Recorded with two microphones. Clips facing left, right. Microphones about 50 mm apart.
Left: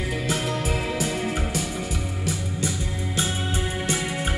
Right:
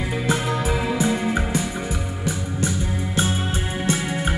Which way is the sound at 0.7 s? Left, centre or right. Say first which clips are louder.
Right 4 dB; centre.